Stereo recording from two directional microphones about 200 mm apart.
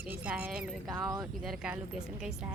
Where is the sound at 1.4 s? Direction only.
Centre (ahead or behind).